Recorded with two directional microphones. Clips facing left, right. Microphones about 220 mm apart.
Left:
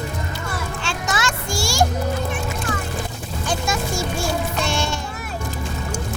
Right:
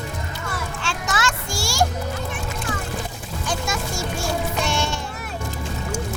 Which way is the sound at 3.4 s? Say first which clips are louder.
Left 3 dB; 30° left (ahead or behind).